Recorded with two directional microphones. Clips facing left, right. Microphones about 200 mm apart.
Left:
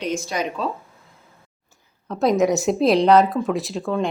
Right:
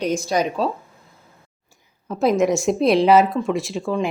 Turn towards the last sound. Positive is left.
turn(degrees=0)  # may be behind; listen again after turning